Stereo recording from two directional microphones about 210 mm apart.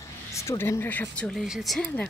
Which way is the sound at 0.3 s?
15° left (ahead or behind).